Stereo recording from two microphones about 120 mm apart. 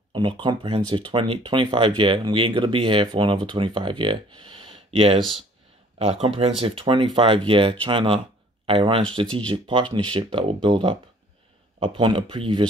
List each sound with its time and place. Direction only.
0.1 s speech: 45° right (ahead or behind)